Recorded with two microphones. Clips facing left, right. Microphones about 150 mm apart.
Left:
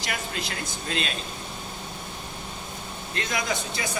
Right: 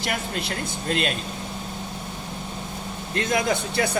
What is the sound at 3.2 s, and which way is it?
Speech, 50° right (ahead or behind).